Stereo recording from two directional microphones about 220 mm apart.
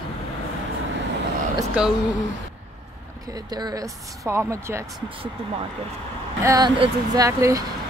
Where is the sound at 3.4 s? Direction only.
20° right (ahead or behind).